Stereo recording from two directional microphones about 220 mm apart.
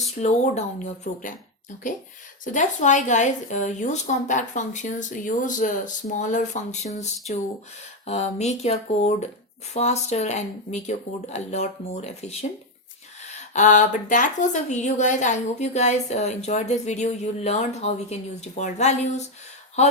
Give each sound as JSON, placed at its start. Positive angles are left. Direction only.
{"t": 0.2, "sound": "speech", "side_deg": 30}
{"t": 2.4, "sound": "speech", "side_deg": 35}